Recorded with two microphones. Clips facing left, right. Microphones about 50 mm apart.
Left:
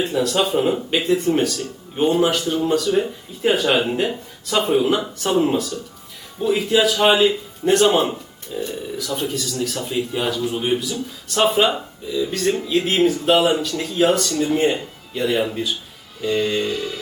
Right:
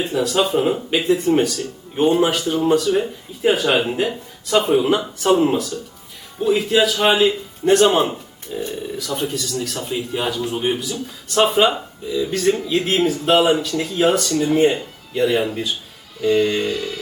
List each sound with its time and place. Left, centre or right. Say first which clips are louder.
0.1 s speech: right 1 dB; centre
8.5 s speech: even; right
9.0 s speech: even; centre